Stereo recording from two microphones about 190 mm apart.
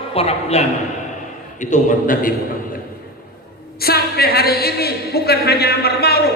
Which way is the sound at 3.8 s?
55° left (ahead or behind).